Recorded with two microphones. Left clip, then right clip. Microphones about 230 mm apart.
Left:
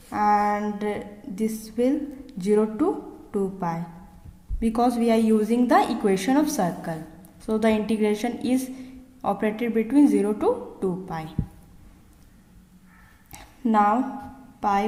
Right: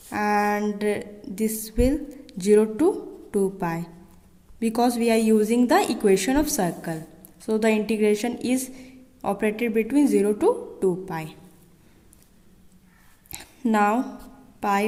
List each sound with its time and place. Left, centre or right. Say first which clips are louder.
0.1 s a woman's voice: left 2 dB; right
13.4 s a woman's voice: left 1 dB; right